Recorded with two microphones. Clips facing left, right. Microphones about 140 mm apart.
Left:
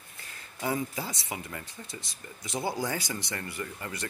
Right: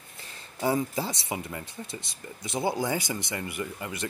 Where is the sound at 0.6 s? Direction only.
30° right (ahead or behind).